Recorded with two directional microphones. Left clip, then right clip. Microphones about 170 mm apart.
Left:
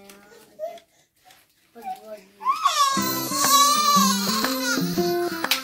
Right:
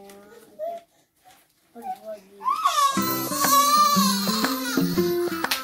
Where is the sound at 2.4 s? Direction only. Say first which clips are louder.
Left 1 dB; 10° right (ahead or behind).